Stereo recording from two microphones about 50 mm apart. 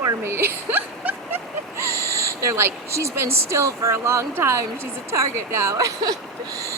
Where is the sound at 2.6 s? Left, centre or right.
Right.